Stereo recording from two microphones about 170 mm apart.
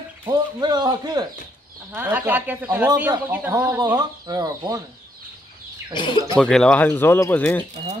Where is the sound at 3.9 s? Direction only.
20° right (ahead or behind).